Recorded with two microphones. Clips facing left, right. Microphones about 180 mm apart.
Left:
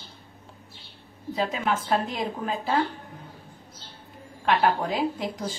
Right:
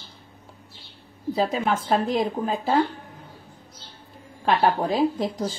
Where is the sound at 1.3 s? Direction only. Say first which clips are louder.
Right 3 dB; 35° right (ahead or behind).